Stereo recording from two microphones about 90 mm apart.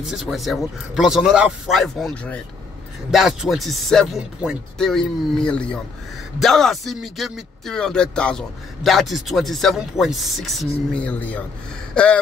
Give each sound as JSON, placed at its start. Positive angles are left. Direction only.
{"t": 0.0, "sound": "a man's voice", "side_deg": -5}
{"t": 8.8, "sound": "a man's voice", "side_deg": 0}
{"t": 10.9, "sound": "speech", "side_deg": 15}
{"t": 11.9, "sound": "gasp", "side_deg": 15}